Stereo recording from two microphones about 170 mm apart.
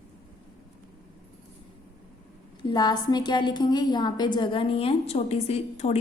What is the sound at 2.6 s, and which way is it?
A woman's voice, 25° left (ahead or behind).